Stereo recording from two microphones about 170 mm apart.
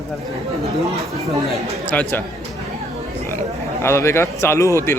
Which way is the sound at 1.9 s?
10° left (ahead or behind).